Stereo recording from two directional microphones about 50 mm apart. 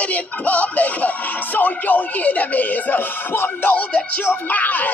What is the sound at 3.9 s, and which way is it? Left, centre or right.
Music, left.